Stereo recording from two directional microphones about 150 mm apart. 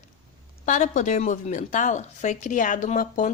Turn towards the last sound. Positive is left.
turn(degrees=55)  # may be behind; listen again after turning